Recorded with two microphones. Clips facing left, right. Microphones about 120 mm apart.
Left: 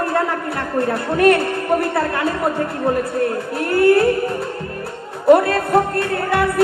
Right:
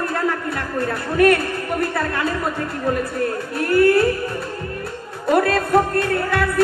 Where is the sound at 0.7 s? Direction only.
25° left (ahead or behind).